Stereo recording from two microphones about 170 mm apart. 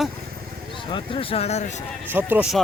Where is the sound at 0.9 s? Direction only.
35° left (ahead or behind).